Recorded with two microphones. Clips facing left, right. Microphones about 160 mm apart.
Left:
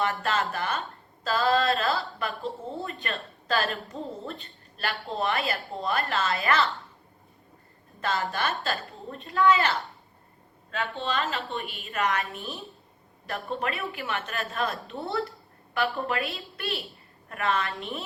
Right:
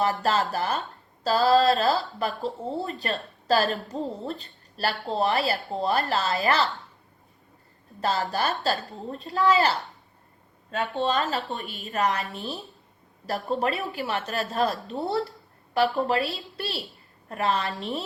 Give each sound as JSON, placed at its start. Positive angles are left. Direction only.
{"t": 0.0, "sound": "a woman's voice", "side_deg": -35}
{"t": 8.0, "sound": "a woman's voice", "side_deg": -35}
{"t": 10.9, "sound": "a woman's voice", "side_deg": -40}
{"t": 12.2, "sound": "a woman's voice", "side_deg": 0}
{"t": 13.2, "sound": "a woman's voice", "side_deg": -35}